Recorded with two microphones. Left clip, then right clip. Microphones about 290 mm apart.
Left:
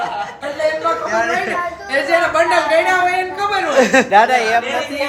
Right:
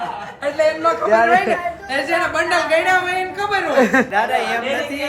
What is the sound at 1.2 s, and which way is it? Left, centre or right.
A woman's voice, centre.